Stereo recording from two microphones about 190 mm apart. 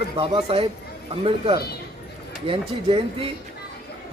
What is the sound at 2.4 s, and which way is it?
Speech, 30° right (ahead or behind).